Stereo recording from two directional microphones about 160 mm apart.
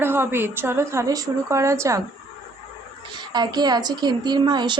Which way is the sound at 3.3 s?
25° right (ahead or behind).